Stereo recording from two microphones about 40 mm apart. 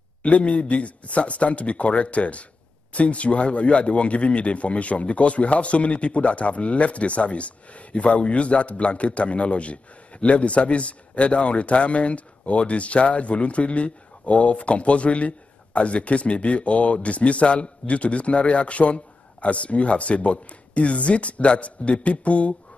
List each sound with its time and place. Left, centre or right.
0.2 s speech: left